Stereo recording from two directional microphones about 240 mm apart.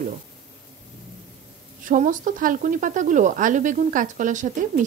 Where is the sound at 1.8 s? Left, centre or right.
Right.